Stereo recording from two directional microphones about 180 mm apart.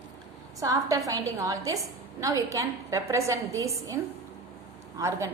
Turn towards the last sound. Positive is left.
turn(degrees=-15)  # may be behind; listen again after turning